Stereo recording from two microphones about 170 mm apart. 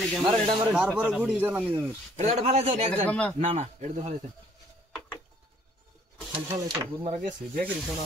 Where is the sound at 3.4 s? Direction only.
40° right (ahead or behind).